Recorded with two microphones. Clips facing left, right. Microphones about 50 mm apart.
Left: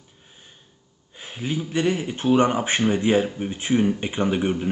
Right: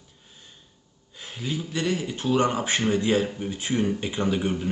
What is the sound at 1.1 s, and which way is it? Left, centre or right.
Speech, left.